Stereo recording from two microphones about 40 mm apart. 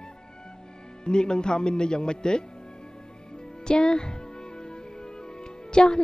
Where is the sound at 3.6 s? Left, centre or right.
Left.